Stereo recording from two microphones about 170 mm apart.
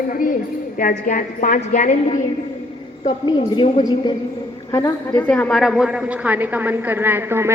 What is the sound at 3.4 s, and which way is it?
Speech, 35° left (ahead or behind).